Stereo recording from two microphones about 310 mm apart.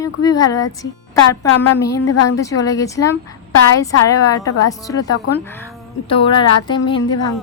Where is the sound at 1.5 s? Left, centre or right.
Left.